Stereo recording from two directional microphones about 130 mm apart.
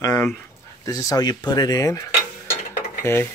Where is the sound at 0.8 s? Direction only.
30° left (ahead or behind).